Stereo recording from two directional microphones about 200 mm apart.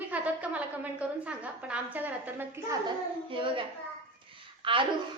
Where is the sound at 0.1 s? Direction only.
5° right (ahead or behind).